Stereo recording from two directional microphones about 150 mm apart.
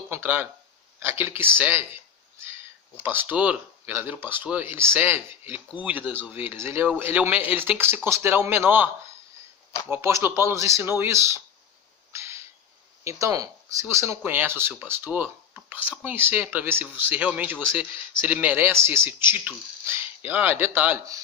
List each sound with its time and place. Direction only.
0.1 s a sound: 15° right (ahead or behind)
0.9 s speech: 15° right (ahead or behind)
3.0 s speech: 10° right (ahead or behind)
9.9 s speech: 20° right (ahead or behind)
12.1 s a sound: 20° right (ahead or behind)
13.1 s speech: 20° right (ahead or behind)